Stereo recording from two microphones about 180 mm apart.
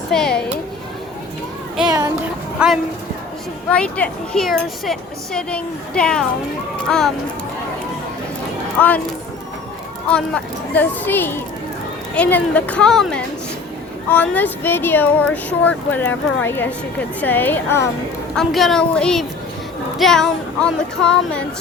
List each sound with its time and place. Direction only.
0.1 s a woman's voice: 5° left (ahead or behind)
1.9 s a sound: 20° right (ahead or behind)
2.6 s a woman's voice: 5° right (ahead or behind)
3.7 s a woman's voice: 5° left (ahead or behind)
8.8 s speech: 5° left (ahead or behind)
10.1 s speech: 5° left (ahead or behind)
18.3 s a woman's voice: centre (ahead or behind)